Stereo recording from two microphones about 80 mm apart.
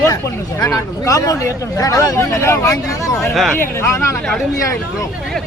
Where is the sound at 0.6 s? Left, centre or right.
Left.